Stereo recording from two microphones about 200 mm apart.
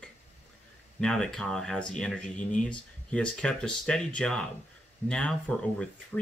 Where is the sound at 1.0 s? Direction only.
5° left (ahead or behind).